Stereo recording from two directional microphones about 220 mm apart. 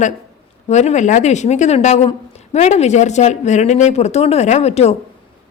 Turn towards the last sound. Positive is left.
turn(degrees=30)  # may be behind; listen again after turning